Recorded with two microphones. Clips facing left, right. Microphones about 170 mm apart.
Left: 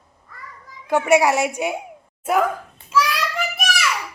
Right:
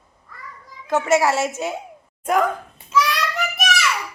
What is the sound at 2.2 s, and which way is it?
Babbling, 5° left (ahead or behind).